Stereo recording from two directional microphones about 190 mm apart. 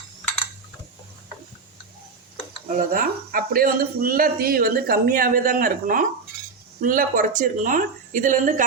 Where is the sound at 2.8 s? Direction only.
45° right (ahead or behind).